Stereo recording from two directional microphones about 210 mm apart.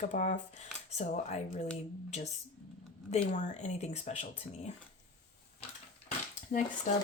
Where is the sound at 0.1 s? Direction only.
35° left (ahead or behind).